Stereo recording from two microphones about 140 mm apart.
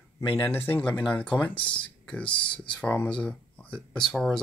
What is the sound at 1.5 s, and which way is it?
Speech, 35° left (ahead or behind).